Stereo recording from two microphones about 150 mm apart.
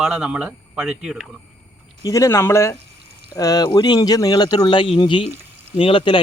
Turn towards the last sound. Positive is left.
turn(degrees=35)  # may be behind; listen again after turning